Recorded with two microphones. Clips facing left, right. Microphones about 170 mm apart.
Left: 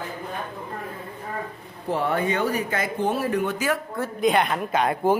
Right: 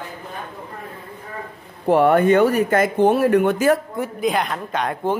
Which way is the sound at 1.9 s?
60° right (ahead or behind).